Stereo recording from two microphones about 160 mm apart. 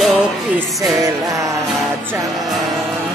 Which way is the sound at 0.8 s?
25° right (ahead or behind).